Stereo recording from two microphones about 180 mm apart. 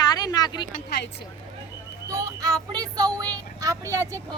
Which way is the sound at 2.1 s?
20° right (ahead or behind).